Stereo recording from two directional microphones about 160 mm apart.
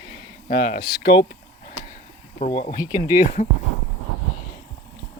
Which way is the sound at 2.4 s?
60° left (ahead or behind).